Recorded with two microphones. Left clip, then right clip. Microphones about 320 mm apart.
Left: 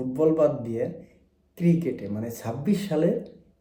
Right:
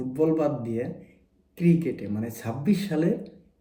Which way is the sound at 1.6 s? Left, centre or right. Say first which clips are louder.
Right 1 dB; centre.